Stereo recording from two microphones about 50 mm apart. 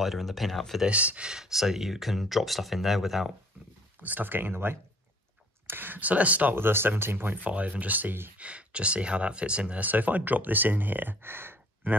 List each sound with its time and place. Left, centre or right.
0.0 s speech: centre
0.8 s speech: right
1.3 s speech: centre
4.0 s speech: right
6.5 s speech: right
8.4 s speech: right
9.8 s speech: right